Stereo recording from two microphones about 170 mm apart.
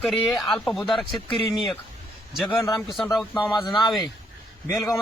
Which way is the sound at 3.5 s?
25° left (ahead or behind).